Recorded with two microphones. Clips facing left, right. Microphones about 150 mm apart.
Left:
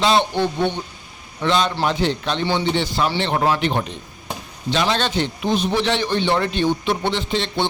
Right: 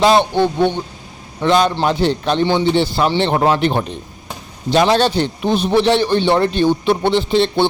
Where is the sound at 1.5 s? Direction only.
45° right (ahead or behind).